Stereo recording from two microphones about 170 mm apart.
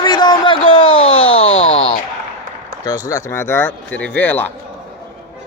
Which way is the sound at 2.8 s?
20° left (ahead or behind).